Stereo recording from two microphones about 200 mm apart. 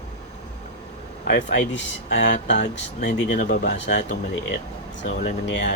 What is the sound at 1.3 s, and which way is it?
Speech, 60° left (ahead or behind).